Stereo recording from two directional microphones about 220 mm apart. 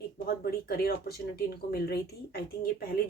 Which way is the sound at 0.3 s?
45° left (ahead or behind).